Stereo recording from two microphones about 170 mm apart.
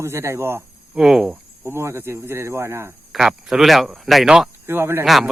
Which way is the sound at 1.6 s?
15° right (ahead or behind).